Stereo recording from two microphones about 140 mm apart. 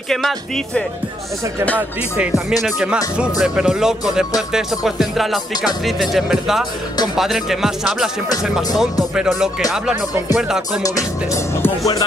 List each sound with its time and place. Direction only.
0.1 s speech: centre (ahead or behind)
2.6 s speech: 5° right (ahead or behind)
10.8 s music: 20° left (ahead or behind)